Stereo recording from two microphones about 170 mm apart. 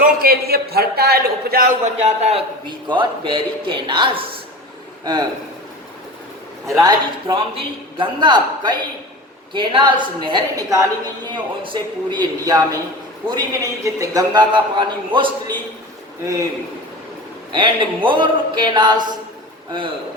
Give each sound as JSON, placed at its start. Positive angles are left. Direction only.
{"t": 0.0, "sound": "a man's voice", "side_deg": -60}
{"t": 1.8, "sound": "a man's voice", "side_deg": -40}
{"t": 2.6, "sound": "a man's voice", "side_deg": -30}
{"t": 6.7, "sound": "a man's voice", "side_deg": -20}
{"t": 17.5, "sound": "a man's voice", "side_deg": -30}